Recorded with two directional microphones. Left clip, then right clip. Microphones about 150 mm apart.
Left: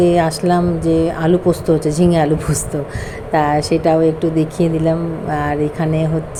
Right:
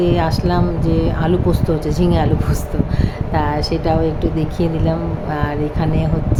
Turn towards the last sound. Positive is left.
turn(degrees=20)  # may be behind; listen again after turning